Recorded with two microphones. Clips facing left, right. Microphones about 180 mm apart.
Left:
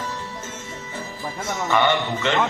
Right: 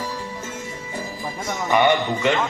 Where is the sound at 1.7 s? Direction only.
15° right (ahead or behind).